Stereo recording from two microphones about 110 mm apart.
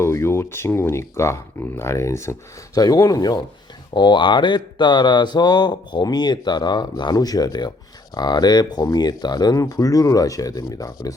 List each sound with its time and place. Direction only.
0.0 s speech: 25° left (ahead or behind)